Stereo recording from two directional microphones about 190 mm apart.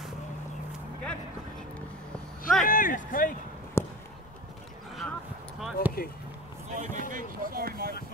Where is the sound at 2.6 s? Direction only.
45° left (ahead or behind).